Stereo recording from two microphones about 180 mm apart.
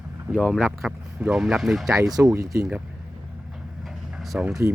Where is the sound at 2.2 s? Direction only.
15° right (ahead or behind).